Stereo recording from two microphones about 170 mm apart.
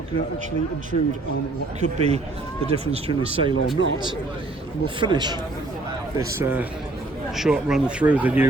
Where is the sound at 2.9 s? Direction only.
35° right (ahead or behind).